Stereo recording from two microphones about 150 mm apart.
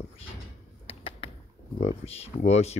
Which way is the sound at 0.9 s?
40° left (ahead or behind).